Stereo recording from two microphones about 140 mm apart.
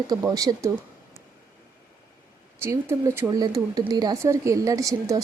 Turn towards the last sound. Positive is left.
turn(degrees=-25)  # may be behind; listen again after turning